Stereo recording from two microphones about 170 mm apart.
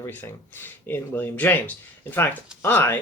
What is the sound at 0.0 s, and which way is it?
Speech, 10° left (ahead or behind).